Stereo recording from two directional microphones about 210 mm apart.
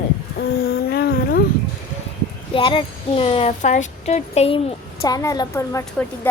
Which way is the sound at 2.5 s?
25° left (ahead or behind).